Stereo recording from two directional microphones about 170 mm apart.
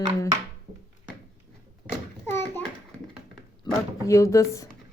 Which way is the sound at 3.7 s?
25° left (ahead or behind).